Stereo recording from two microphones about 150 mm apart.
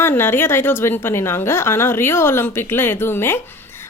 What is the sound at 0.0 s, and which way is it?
A woman's voice, 15° left (ahead or behind).